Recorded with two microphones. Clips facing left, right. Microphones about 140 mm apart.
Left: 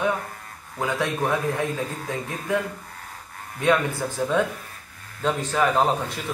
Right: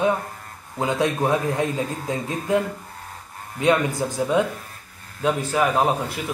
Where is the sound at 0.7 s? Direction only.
20° right (ahead or behind).